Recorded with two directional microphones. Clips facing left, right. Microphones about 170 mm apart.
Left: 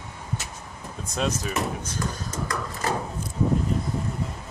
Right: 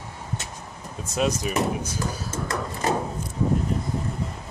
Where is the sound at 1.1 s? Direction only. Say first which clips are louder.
Right 3 dB; 10° right (ahead or behind).